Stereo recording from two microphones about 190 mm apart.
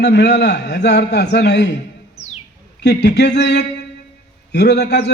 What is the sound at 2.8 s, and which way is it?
A man's voice, 65° left (ahead or behind).